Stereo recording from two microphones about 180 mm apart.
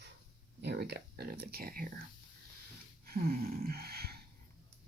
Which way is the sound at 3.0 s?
55° right (ahead or behind).